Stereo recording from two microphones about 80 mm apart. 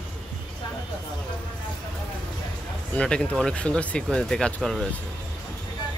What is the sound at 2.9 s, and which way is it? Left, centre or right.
Speech, centre.